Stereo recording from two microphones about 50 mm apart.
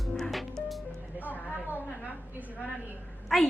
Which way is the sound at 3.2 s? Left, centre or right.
Centre.